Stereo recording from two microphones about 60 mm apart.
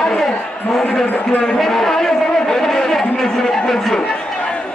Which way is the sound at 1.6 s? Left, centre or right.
Centre.